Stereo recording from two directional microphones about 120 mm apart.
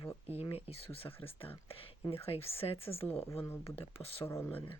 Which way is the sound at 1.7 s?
50° left (ahead or behind).